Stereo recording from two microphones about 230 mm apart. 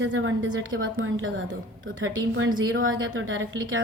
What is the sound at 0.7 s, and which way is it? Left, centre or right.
A woman's voice, right.